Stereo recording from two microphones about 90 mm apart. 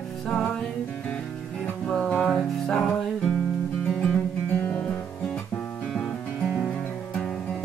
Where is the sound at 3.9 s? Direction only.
10° left (ahead or behind).